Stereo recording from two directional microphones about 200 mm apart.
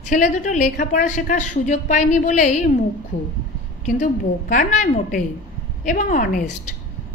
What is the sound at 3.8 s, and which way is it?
A woman's voice, 40° left (ahead or behind).